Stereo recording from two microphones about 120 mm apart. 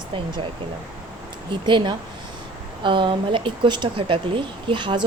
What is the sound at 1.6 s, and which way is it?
Speech, 40° right (ahead or behind).